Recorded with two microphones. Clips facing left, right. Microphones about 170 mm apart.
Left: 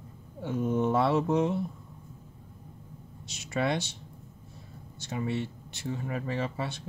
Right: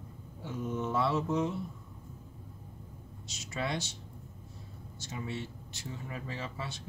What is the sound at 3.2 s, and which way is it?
Speech, 60° left (ahead or behind).